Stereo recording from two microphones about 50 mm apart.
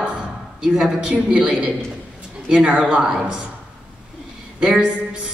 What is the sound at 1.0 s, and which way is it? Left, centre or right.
Music, centre.